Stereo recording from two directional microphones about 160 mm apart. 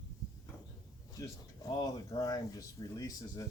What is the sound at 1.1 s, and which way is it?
Speech, 20° left (ahead or behind).